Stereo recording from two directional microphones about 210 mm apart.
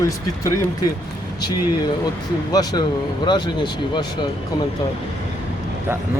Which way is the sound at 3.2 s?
20° left (ahead or behind).